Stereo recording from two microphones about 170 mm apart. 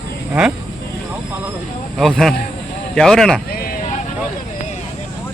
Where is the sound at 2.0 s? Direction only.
Centre (ahead or behind).